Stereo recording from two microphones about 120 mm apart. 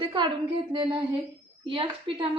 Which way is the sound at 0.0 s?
40° right (ahead or behind).